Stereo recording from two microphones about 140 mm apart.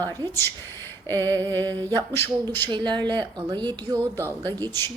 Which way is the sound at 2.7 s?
35° right (ahead or behind).